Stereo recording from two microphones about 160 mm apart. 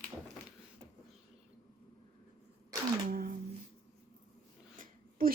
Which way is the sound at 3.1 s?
65° right (ahead or behind).